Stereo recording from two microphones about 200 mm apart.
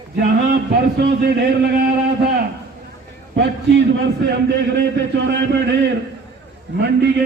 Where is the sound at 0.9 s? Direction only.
55° right (ahead or behind).